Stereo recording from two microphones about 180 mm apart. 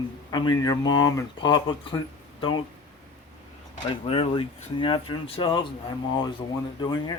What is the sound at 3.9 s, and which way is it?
Speech, 30° left (ahead or behind).